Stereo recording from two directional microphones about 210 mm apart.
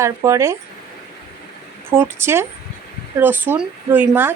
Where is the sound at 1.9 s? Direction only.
10° right (ahead or behind).